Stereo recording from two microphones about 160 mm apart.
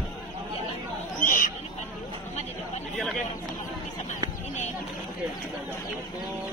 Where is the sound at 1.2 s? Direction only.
55° left (ahead or behind).